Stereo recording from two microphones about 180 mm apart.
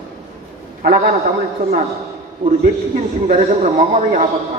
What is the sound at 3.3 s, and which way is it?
Speech, 40° right (ahead or behind).